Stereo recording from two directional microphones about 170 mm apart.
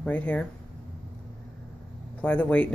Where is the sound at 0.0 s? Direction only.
10° left (ahead or behind).